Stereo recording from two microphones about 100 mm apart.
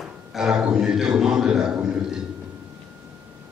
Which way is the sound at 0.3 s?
5° right (ahead or behind).